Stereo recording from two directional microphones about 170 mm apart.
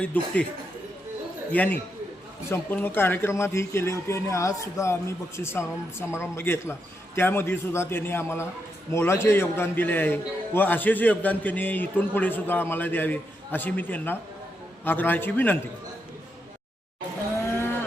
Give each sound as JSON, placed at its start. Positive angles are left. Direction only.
{"t": 0.0, "sound": "a man's voice", "side_deg": 10}
{"t": 1.5, "sound": "a man's voice", "side_deg": 10}